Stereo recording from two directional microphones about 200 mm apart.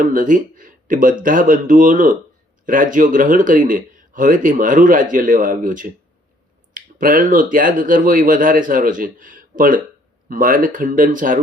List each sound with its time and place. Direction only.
0.0 s a man's voice: 40° right (ahead or behind)